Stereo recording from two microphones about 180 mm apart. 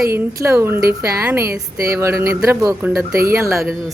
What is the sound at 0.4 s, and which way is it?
A woman's voice, 15° right (ahead or behind).